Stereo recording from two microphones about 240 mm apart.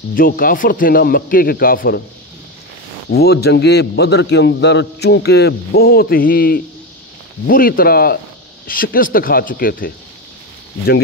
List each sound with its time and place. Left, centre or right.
0.1 s a man's voice: left
3.1 s a man's voice: left